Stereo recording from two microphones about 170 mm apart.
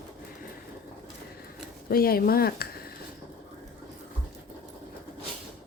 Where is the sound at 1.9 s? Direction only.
60° left (ahead or behind).